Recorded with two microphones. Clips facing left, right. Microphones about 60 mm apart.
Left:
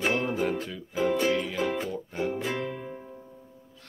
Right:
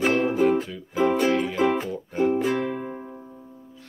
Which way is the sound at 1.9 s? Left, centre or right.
Centre.